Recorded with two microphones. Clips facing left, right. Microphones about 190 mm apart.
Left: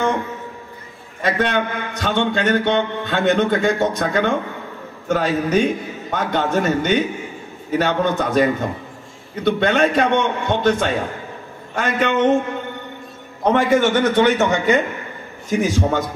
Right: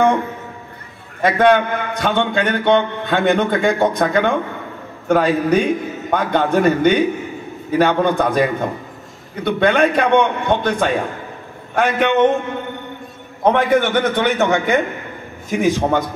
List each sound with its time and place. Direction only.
1.2 s a man's voice: 55° right (ahead or behind)
13.4 s a man's voice: 55° right (ahead or behind)